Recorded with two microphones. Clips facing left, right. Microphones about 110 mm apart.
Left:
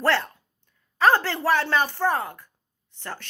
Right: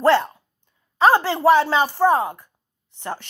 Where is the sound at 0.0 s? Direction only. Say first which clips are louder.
Right 7 dB; 15° right (ahead or behind).